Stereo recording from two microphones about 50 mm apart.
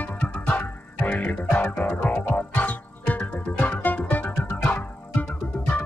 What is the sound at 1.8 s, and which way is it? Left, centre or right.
Music, left.